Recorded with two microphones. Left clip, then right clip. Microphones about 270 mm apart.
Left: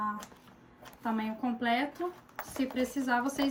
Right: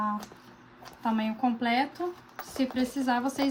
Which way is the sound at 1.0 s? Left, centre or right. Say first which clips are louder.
Right 6 dB; centre.